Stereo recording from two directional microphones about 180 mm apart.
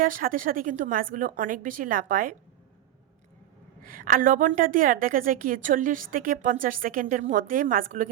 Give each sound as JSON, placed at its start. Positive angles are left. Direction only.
{"t": 0.0, "sound": "a woman's voice", "side_deg": -50}
{"t": 3.8, "sound": "a woman's voice", "side_deg": -50}